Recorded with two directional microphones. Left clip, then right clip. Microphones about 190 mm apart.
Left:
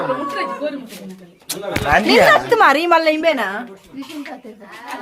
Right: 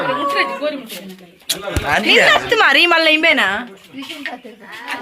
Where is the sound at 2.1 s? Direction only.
40° left (ahead or behind).